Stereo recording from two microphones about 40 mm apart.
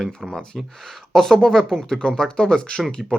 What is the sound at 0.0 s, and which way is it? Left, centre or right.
Speech, centre.